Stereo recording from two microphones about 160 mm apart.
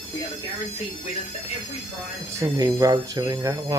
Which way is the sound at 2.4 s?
20° right (ahead or behind).